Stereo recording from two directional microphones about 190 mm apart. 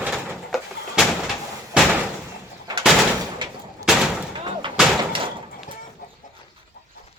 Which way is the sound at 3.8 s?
5° right (ahead or behind).